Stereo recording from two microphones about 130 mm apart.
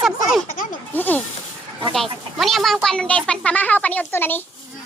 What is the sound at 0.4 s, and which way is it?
Speech, 90° left.